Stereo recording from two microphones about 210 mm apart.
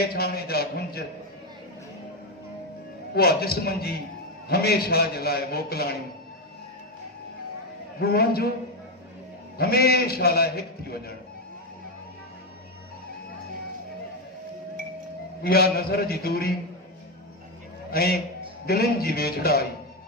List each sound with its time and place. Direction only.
0.0 s a man's voice: 50° left (ahead or behind)
3.2 s a man's voice: 45° left (ahead or behind)
7.9 s a man's voice: 50° left (ahead or behind)
9.6 s a man's voice: 45° left (ahead or behind)
15.4 s a man's voice: 45° left (ahead or behind)
17.9 s a man's voice: 45° left (ahead or behind)